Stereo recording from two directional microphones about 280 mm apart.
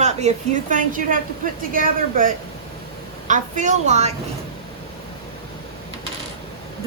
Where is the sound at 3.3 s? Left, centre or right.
Right.